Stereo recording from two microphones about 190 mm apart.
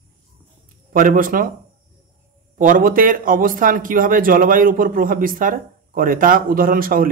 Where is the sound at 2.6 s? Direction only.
45° right (ahead or behind).